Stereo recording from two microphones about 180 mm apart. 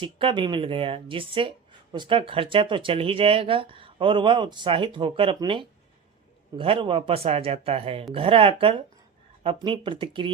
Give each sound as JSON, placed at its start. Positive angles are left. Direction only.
{"t": 0.0, "sound": "speech", "side_deg": -25}